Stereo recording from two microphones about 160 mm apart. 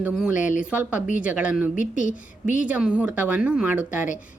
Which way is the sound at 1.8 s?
55° left (ahead or behind).